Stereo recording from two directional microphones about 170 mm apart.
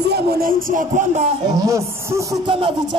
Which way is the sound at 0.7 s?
50° right (ahead or behind).